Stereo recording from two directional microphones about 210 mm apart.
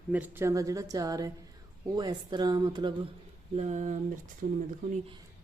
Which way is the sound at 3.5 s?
35° right (ahead or behind).